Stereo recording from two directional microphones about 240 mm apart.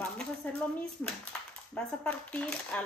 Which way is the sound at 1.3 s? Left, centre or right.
Centre.